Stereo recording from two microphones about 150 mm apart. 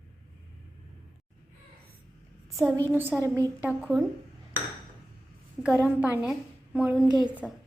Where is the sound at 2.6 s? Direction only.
20° right (ahead or behind).